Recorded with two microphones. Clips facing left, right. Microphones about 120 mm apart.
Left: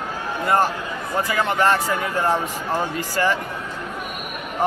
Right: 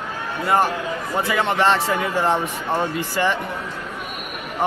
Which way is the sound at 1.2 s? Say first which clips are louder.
Right 1 dB; 25° right (ahead or behind).